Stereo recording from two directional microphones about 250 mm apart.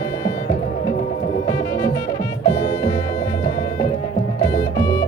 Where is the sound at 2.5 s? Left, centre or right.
Left.